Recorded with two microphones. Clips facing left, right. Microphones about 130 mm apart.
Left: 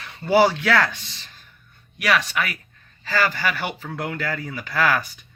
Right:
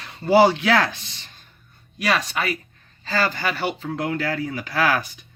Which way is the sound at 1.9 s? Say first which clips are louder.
Left 1 dB; 30° right (ahead or behind).